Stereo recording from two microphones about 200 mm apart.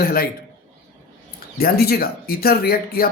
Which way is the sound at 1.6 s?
50° left (ahead or behind).